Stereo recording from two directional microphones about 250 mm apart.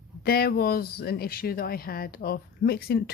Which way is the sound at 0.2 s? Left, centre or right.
Left.